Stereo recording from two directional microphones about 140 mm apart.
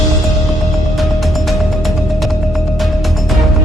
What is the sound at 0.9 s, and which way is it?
Music, centre (ahead or behind).